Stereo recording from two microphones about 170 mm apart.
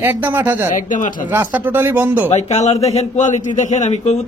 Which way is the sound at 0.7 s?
50° left (ahead or behind).